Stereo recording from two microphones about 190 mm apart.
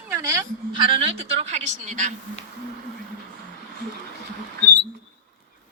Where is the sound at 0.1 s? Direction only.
15° right (ahead or behind); by 2.1 s 40° right (ahead or behind).